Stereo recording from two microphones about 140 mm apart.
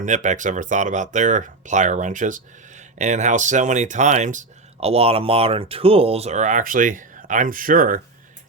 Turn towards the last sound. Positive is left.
turn(degrees=-75)  # may be behind; listen again after turning